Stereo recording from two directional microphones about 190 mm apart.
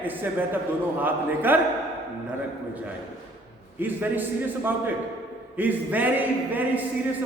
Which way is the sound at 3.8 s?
10° right (ahead or behind).